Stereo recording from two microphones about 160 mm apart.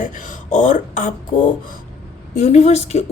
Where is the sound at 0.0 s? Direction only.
55° left (ahead or behind).